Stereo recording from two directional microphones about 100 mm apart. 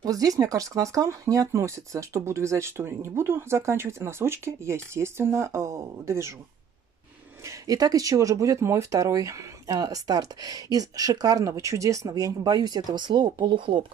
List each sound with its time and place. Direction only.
0.0 s speech: 35° right (ahead or behind)
7.4 s speech: 40° right (ahead or behind); by 13.8 s 55° right (ahead or behind)